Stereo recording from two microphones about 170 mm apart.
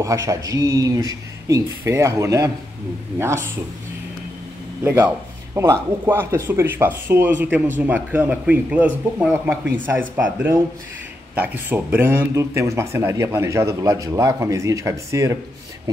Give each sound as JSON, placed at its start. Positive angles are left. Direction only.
{"t": 0.0, "sound": "speech", "side_deg": -20}
{"t": 4.8, "sound": "speech", "side_deg": -10}